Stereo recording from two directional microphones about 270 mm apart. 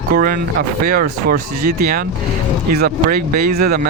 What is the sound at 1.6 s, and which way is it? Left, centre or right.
Speech, right.